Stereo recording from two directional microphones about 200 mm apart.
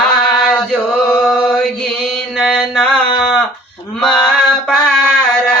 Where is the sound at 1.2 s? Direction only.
Centre (ahead or behind).